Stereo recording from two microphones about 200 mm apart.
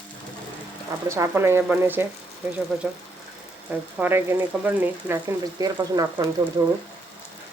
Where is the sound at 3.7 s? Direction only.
10° right (ahead or behind).